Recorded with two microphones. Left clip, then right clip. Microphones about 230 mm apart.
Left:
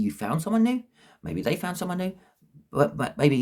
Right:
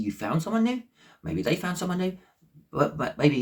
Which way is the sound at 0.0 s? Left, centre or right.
Left.